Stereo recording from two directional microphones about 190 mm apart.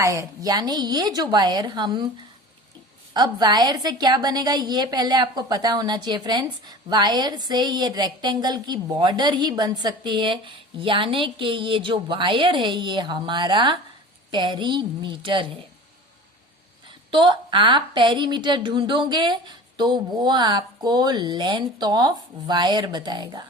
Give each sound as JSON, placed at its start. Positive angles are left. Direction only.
{"t": 0.0, "sound": "a woman's voice", "side_deg": -15}
{"t": 3.2, "sound": "a woman's voice", "side_deg": -20}
{"t": 17.1, "sound": "a woman's voice", "side_deg": -25}